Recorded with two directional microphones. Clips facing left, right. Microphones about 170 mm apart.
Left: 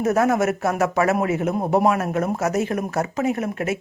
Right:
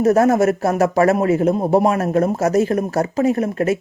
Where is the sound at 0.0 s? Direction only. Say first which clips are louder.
Right 5 dB; 35° right (ahead or behind).